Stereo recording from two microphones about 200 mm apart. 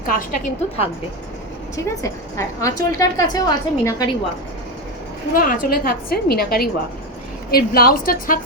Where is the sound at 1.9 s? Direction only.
15° left (ahead or behind).